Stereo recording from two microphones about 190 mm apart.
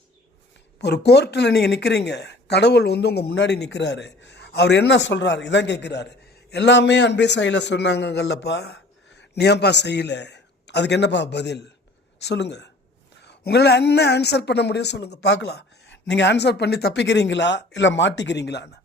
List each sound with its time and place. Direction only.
0.8 s speech: 60° left (ahead or behind)